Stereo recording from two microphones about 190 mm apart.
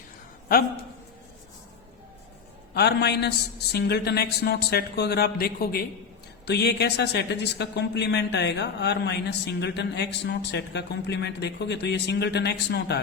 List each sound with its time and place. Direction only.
2.7 s speech: 60° left (ahead or behind)